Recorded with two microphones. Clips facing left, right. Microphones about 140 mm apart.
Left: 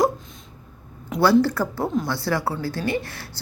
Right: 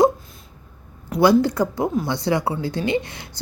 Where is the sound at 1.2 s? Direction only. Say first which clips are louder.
Right 2 dB; 15° right (ahead or behind).